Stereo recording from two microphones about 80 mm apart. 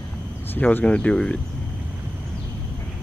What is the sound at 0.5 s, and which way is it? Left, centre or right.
Speech, left.